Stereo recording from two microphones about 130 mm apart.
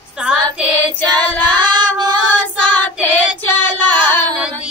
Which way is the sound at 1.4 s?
35° right (ahead or behind).